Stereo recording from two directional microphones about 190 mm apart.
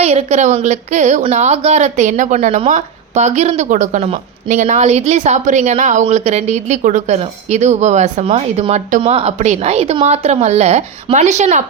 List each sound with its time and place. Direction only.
0.0 s a woman's voice: 35° right (ahead or behind)